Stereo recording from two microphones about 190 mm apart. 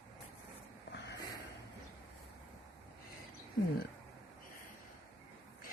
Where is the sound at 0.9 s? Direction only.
65° left (ahead or behind).